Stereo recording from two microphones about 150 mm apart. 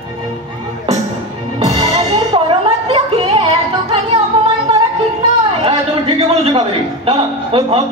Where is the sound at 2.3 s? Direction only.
35° right (ahead or behind).